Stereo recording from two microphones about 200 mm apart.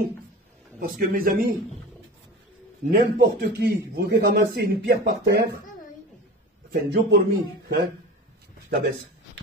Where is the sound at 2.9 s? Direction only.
50° right (ahead or behind).